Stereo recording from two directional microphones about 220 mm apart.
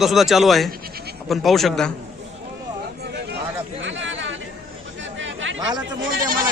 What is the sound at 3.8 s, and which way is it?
Chatter, 60° right (ahead or behind).